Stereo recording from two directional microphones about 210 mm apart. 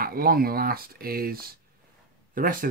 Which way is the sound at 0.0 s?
45° right (ahead or behind).